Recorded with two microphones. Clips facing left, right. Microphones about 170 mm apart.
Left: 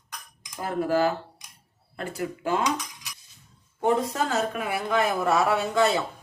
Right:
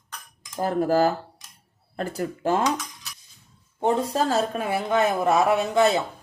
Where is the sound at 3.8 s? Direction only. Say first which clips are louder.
Right 1 dB; 30° right (ahead or behind).